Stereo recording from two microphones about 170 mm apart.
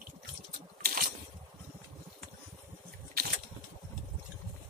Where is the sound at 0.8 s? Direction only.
60° right (ahead or behind).